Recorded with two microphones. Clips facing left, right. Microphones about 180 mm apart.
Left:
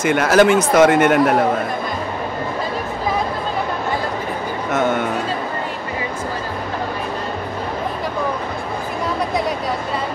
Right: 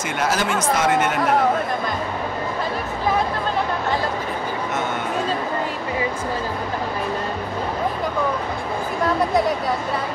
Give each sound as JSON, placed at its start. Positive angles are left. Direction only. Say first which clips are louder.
{"t": 0.0, "sound": "speech", "louder": "left 9 dB", "side_deg": 60}